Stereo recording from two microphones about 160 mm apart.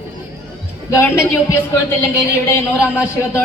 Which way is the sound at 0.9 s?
15° left (ahead or behind).